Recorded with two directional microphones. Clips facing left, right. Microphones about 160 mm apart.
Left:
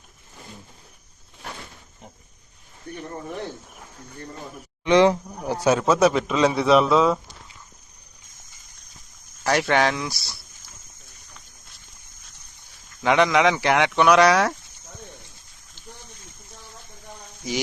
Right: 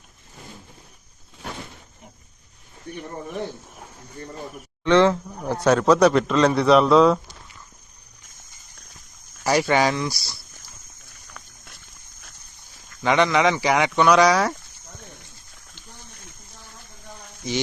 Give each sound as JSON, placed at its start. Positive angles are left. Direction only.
{"t": 4.8, "sound": "a man's voice", "side_deg": 15}
{"t": 9.4, "sound": "a man's voice", "side_deg": -5}
{"t": 11.3, "sound": "a sound", "side_deg": -65}
{"t": 13.0, "sound": "a man's voice", "side_deg": 0}